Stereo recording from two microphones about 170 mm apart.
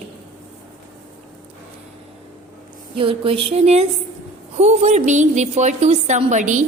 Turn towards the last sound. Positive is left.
turn(degrees=-45)  # may be behind; listen again after turning